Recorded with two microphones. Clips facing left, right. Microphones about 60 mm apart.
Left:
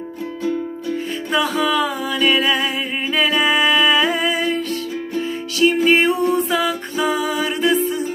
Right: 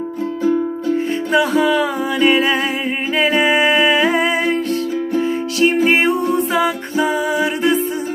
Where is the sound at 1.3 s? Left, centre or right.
Right.